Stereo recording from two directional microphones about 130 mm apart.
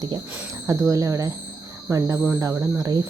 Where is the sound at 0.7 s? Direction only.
25° right (ahead or behind).